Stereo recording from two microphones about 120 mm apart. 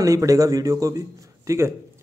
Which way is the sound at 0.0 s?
30° right (ahead or behind).